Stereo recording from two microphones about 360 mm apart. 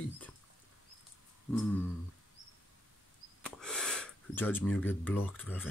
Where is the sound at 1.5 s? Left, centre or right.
Centre.